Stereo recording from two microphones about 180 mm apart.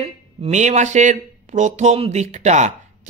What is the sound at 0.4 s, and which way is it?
Speech, 40° right (ahead or behind).